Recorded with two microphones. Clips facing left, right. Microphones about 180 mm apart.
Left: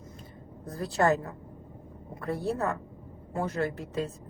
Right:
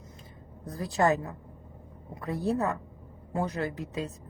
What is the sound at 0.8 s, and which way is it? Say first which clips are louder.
Speech: even; 20° right (ahead or behind).